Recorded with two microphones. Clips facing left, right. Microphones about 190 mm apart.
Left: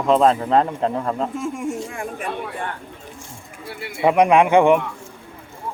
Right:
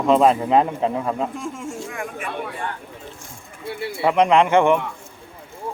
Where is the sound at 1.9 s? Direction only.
35° left (ahead or behind).